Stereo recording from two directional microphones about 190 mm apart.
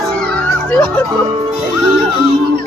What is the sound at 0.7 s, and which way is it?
Speech, 10° left (ahead or behind).